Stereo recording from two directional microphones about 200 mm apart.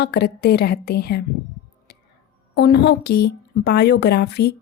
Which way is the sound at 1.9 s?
55° left (ahead or behind).